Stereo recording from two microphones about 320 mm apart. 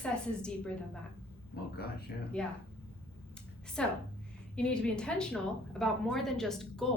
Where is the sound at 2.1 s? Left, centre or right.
Left.